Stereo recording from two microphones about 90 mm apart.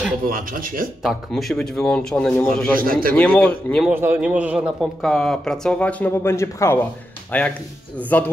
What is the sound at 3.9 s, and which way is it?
Speech, 25° right (ahead or behind).